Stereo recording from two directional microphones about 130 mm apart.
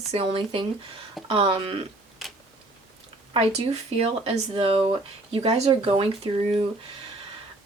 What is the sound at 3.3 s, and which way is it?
Speech, 50° right (ahead or behind).